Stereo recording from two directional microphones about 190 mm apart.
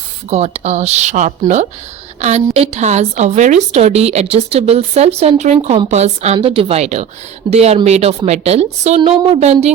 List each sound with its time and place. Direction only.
0.3 s a woman's voice: 35° right (ahead or behind)